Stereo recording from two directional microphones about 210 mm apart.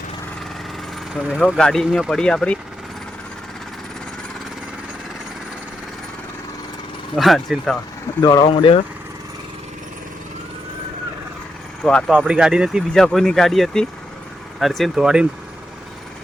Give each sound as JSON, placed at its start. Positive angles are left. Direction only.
{"t": 1.4, "sound": "speech", "side_deg": 5}
{"t": 7.2, "sound": "speech", "side_deg": 0}
{"t": 8.2, "sound": "speech", "side_deg": 20}
{"t": 11.8, "sound": "speech", "side_deg": 5}